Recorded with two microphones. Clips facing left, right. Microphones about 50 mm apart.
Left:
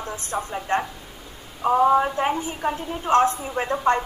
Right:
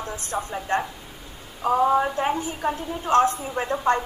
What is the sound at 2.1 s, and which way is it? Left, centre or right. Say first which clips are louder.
A woman's voice: left 1 dB; left.